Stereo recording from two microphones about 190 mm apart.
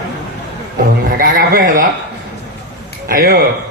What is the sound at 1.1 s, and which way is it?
Speech, 50° right (ahead or behind).